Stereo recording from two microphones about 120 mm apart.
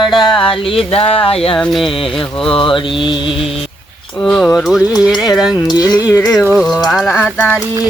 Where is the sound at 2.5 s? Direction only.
45° left (ahead or behind).